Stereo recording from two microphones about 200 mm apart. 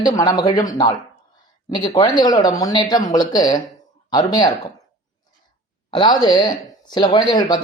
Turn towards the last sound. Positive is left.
turn(degrees=20)  # may be behind; listen again after turning